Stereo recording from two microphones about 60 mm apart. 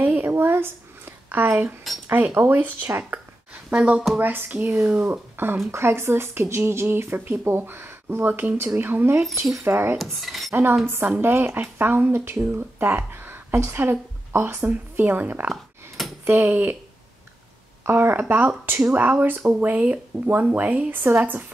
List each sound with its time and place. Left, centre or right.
0.0 s a sound: right
0.3 s a sound: right
2.0 s speech: right
3.7 s speech: centre
4.2 s speech: right
9.3 s speech: right
9.7 s speech: right
9.9 s speech: centre
10.5 s speech: right
17.8 s speech: right
18.9 s speech: right